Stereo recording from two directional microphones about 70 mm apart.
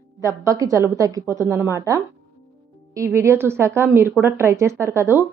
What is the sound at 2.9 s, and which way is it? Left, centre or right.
A woman's voice, right.